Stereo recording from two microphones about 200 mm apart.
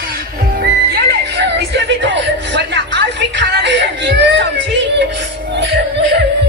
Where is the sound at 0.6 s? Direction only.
55° right (ahead or behind).